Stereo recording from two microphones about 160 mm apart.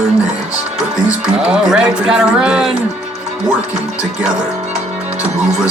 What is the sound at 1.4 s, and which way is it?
Speech, 5° right (ahead or behind).